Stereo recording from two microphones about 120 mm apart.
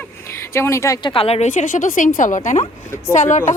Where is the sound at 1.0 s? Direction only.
50° left (ahead or behind).